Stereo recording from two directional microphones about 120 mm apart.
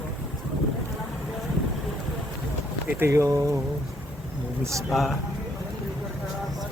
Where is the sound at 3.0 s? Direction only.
25° right (ahead or behind).